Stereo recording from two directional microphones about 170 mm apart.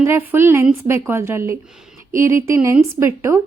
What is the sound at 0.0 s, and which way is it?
A woman's voice, 10° right (ahead or behind).